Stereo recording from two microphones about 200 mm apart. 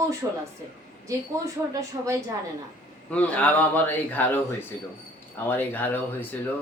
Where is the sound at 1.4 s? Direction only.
15° right (ahead or behind).